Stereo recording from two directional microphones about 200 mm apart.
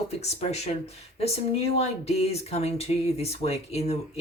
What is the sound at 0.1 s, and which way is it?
Speech, 35° left (ahead or behind).